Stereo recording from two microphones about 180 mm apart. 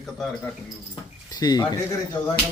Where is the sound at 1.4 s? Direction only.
20° left (ahead or behind).